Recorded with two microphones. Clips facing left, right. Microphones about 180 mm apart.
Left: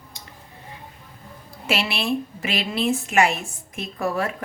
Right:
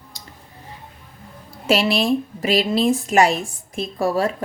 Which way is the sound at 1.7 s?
40° right (ahead or behind).